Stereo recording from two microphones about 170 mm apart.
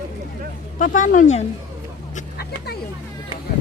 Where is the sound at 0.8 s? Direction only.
50° left (ahead or behind).